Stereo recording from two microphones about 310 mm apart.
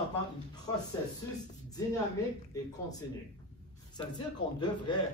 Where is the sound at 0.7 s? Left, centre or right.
Centre.